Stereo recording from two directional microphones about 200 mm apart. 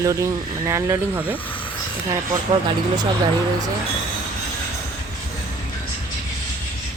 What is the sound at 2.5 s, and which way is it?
Speech, 20° right (ahead or behind).